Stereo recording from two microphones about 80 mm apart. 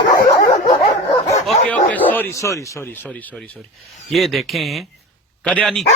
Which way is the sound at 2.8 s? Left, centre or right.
Left.